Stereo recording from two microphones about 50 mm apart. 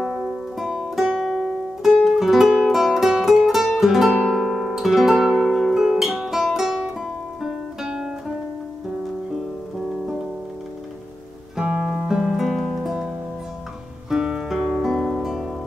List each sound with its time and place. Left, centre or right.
0.0 s music: centre
3.7 s guitar: centre
5.3 s music: centre
5.8 s music: centre
7.4 s guitar: centre
11.5 s music: centre
12.4 s music: centre
14.1 s music: centre